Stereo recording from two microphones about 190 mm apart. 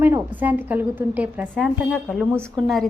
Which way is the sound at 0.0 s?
10° right (ahead or behind).